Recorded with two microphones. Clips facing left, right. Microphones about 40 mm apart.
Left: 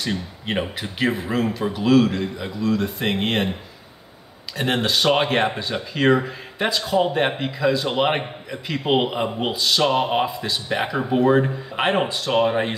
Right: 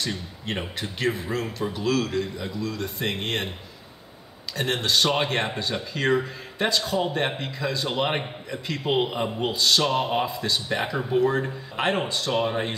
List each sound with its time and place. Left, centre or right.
0.0 s speech: centre
4.6 s speech: centre
9.6 s a sound: centre
9.8 s speech: centre
10.2 s speech: centre
11.0 s speech: left